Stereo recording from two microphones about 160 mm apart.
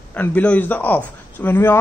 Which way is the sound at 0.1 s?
10° left (ahead or behind).